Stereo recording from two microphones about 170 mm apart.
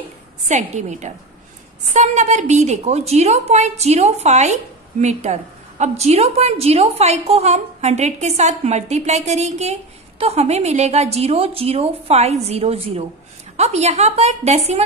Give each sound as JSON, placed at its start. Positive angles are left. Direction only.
{"t": 0.5, "sound": "a woman's voice", "side_deg": -45}